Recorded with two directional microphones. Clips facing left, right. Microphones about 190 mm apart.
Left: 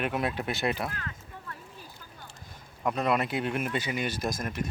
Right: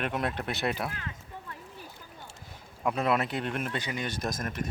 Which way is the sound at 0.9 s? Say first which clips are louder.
Even; 20° right (ahead or behind).